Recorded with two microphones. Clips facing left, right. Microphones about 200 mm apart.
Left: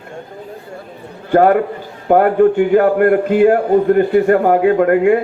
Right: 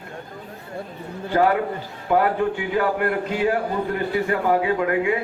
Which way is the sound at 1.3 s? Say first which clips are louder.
Left 8 dB; 50° left (ahead or behind).